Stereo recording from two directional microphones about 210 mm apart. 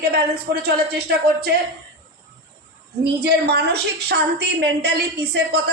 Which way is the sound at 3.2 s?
50° right (ahead or behind).